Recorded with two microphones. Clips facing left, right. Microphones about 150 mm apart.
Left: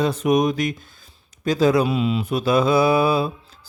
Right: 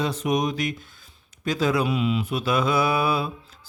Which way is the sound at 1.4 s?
35° left (ahead or behind).